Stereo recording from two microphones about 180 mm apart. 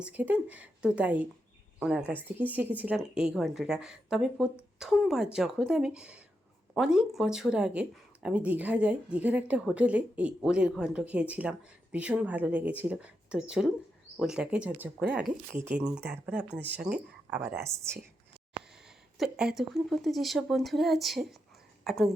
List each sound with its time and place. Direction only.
0.0 s speech: 10° right (ahead or behind)
19.1 s speech: 5° right (ahead or behind)